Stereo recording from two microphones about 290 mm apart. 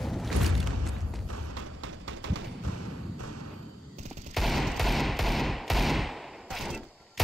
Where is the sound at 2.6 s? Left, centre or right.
Right.